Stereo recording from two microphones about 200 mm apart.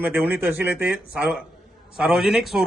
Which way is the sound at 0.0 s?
10° right (ahead or behind).